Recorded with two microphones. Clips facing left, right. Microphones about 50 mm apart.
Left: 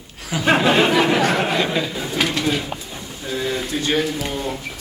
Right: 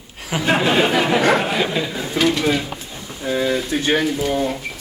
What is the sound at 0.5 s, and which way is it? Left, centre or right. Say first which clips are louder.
Speech: left 1 dB; centre.